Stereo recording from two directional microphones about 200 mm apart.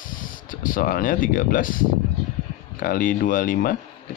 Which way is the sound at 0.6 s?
45° left (ahead or behind).